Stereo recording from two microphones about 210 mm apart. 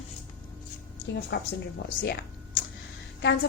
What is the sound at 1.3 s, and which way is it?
A woman's voice, 50° left (ahead or behind).